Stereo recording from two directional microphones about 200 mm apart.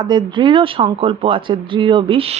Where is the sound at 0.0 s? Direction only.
20° right (ahead or behind).